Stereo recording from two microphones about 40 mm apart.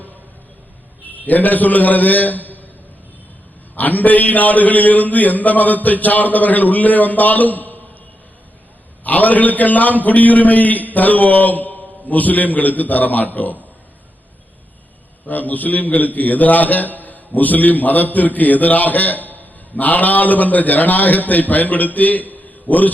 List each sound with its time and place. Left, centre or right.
1.1 s a man's voice: left
3.8 s a man's voice: left
9.0 s a man's voice: left
15.3 s a man's voice: left